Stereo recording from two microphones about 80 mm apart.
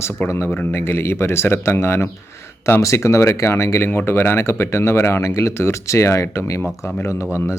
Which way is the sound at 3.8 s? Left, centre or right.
Left.